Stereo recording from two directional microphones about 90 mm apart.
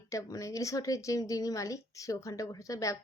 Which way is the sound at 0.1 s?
35° left (ahead or behind).